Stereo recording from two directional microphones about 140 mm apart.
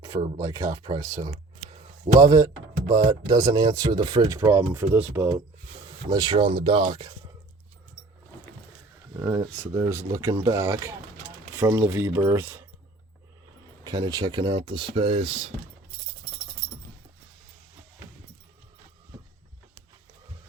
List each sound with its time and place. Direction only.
0.3 s speech: 25° right (ahead or behind)
6.1 s speech: 30° right (ahead or behind)
9.1 s speech: 30° right (ahead or behind)
13.8 s speech: 30° right (ahead or behind)